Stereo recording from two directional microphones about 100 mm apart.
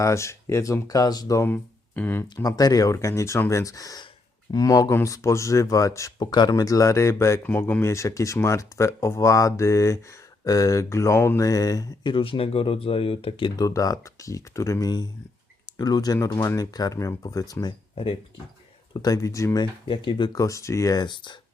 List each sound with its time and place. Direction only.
0.0 s speech: 30° left (ahead or behind)
1.5 s speech: 15° left (ahead or behind)
2.3 s speech: 40° left (ahead or behind)
6.1 s speech: 45° left (ahead or behind)
12.1 s speech: 60° left (ahead or behind)
13.6 s speech: 35° left (ahead or behind)
17.5 s speech: 45° left (ahead or behind)
18.9 s speech: 35° left (ahead or behind)
20.1 s speech: 55° left (ahead or behind)
20.3 s speech: 30° left (ahead or behind); by 21.3 s 50° left (ahead or behind)